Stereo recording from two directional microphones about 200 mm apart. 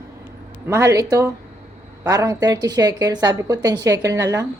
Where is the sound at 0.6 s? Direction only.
15° right (ahead or behind).